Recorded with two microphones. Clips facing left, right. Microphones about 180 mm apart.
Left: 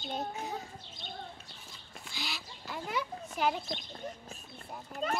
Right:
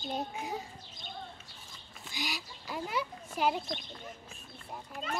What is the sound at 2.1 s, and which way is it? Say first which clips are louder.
A child's voice: right 3 dB; 15° right (ahead or behind).